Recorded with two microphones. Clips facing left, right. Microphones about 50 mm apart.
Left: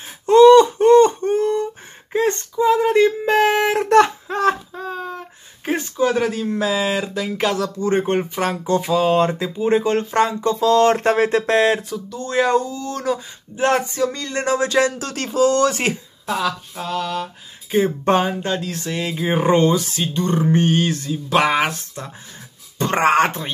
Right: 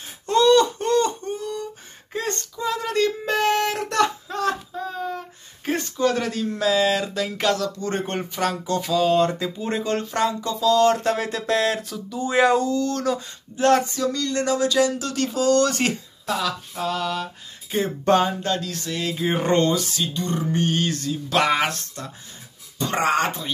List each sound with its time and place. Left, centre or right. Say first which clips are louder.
0.3 s a sound: left 8 dB; left
2.1 s a sound: left 9 dB; left
3.7 s a sound: left 8 dB; left
5.7 s speech: left 3 dB; centre
7.5 s speech: left 6 dB; left
9.3 s speech: left 7 dB; centre
12.1 s speech: even; centre
13.6 s speech: left 1 dB; left
19.1 s speech: left 4 dB; centre
19.7 s speech: left 3 dB; left; by 21.8 s centre
22.8 s speech: left 5 dB; left